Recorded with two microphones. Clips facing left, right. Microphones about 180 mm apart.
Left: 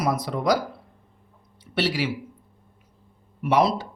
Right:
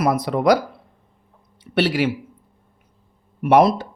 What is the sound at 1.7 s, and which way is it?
Speech, 55° right (ahead or behind).